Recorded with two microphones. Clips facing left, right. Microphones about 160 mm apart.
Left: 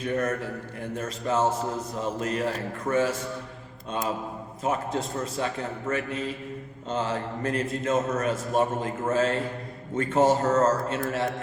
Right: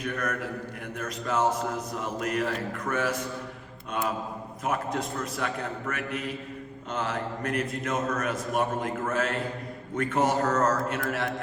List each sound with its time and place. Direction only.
0.0 s a man's voice: 25° left (ahead or behind)
4.6 s a man's voice: 25° left (ahead or behind)